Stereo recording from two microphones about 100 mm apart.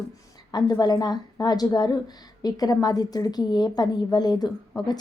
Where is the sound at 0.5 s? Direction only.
40° left (ahead or behind).